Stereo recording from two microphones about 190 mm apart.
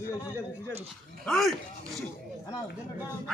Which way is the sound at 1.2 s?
Centre (ahead or behind).